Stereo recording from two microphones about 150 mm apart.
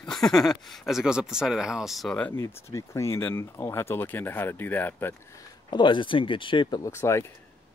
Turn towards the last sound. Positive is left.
turn(degrees=15)  # may be behind; listen again after turning